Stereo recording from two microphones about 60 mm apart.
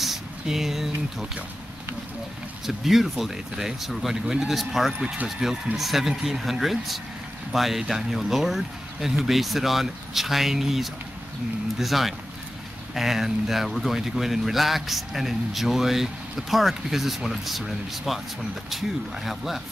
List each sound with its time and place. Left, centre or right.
0.0 s speech: centre
2.6 s speech: centre
5.0 s speech: right
5.8 s speech: centre